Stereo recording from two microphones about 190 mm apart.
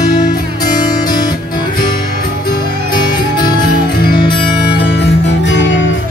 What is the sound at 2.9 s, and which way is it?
Music, 25° left (ahead or behind).